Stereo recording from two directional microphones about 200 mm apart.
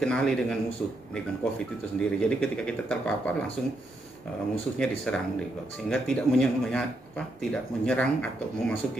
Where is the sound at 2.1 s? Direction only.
5° left (ahead or behind).